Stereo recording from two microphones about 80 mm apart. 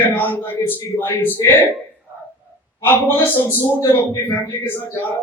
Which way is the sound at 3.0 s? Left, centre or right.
Left.